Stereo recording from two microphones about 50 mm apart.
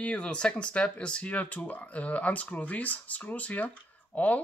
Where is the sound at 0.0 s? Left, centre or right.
Left.